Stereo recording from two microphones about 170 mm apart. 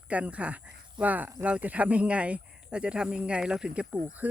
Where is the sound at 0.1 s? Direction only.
5° right (ahead or behind).